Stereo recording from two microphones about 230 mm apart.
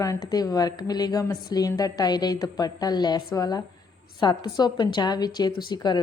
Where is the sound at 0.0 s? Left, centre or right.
Centre.